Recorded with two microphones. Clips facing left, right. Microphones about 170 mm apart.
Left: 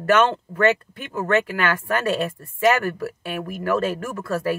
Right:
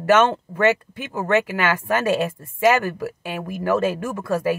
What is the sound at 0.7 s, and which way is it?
Speech, 15° right (ahead or behind).